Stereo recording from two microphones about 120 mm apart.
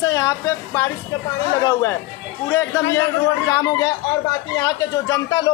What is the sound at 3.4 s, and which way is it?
A man's voice, 30° left (ahead or behind).